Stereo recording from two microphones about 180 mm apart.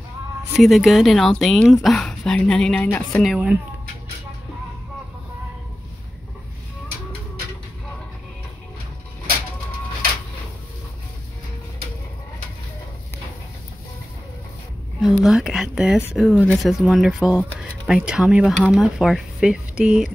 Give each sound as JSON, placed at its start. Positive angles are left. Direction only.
{"t": 0.5, "sound": "speech", "side_deg": 0}
{"t": 3.3, "sound": "speech", "side_deg": -5}
{"t": 15.2, "sound": "speech", "side_deg": 0}